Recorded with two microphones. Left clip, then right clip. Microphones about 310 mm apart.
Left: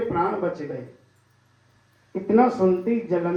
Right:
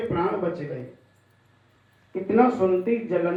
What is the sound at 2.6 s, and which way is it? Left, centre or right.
Speech, left.